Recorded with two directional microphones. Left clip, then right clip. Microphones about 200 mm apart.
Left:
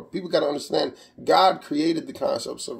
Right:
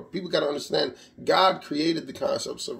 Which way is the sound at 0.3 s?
5° left (ahead or behind).